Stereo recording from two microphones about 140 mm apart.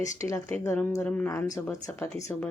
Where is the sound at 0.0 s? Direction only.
25° left (ahead or behind).